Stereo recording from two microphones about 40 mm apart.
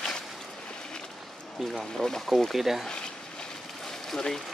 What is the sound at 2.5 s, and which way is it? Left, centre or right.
Speech, centre.